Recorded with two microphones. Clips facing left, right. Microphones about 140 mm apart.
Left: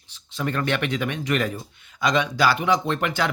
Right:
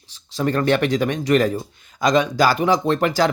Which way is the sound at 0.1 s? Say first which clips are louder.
Right 6 dB; 35° right (ahead or behind).